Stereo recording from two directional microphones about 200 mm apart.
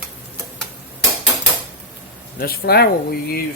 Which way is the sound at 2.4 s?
50° left (ahead or behind).